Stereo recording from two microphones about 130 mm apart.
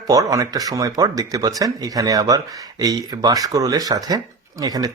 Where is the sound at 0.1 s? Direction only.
25° right (ahead or behind).